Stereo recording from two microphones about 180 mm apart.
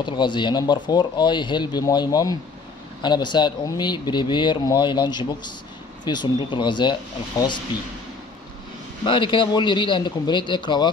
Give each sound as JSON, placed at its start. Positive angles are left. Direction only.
{"t": 0.0, "sound": "speech", "side_deg": 25}
{"t": 9.0, "sound": "speech", "side_deg": 25}